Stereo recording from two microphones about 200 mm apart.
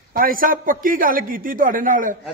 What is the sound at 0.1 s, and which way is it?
A man's voice, 45° right (ahead or behind).